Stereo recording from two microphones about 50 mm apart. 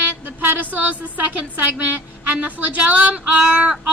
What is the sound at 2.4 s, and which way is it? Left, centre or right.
Speech, right.